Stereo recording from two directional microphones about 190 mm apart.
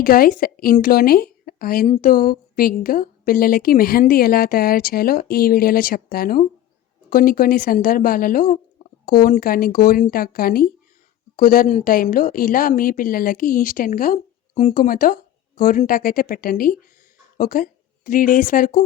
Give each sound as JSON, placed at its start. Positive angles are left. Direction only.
{"t": 0.0, "sound": "speech", "side_deg": 50}